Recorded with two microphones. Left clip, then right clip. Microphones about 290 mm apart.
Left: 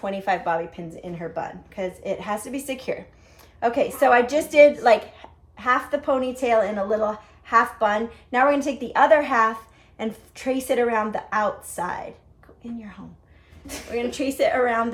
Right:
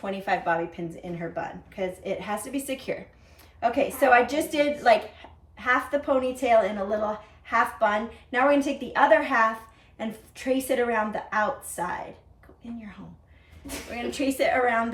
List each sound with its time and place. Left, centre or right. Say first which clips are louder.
0.0 s a woman's voice: left 3 dB; centre
13.9 s a woman's voice: left 3 dB; centre